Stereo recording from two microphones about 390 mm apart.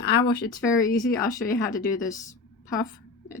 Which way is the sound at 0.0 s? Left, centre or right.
Left.